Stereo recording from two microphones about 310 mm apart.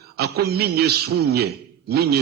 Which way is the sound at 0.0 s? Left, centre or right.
Right.